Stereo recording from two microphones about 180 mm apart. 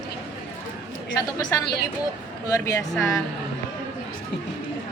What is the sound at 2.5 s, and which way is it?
Speech, 20° left (ahead or behind).